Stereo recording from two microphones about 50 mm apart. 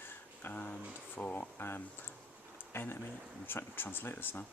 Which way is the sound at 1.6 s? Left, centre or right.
Left.